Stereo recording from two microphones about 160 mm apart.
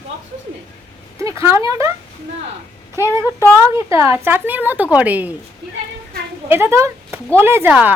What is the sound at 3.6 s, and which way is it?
A woman's voice, 20° right (ahead or behind).